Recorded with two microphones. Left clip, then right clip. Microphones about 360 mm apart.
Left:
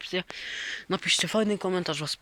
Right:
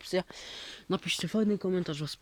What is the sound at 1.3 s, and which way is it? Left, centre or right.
Speech, centre.